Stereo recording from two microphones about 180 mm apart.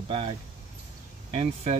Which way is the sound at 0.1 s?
30° right (ahead or behind).